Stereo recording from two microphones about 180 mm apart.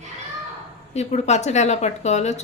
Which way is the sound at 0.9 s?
40° left (ahead or behind).